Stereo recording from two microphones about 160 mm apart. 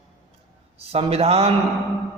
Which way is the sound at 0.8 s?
40° right (ahead or behind).